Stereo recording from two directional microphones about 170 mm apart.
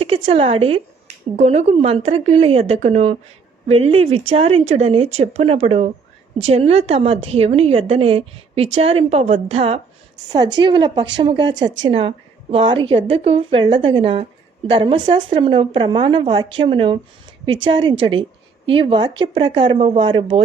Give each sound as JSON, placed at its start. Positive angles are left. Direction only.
{"t": 0.3, "sound": "a woman's voice", "side_deg": -35}
{"t": 10.2, "sound": "a woman's voice", "side_deg": -25}